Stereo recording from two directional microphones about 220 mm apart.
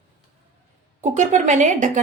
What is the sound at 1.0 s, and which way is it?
Speech, 35° right (ahead or behind).